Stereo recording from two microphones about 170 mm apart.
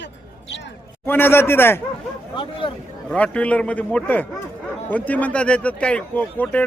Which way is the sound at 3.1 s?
5° left (ahead or behind).